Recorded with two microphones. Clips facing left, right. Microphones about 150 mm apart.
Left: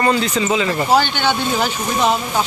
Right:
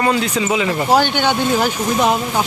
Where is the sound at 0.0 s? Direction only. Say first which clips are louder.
Even; 5° right (ahead or behind).